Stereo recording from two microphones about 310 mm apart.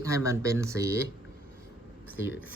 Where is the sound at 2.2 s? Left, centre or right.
Left.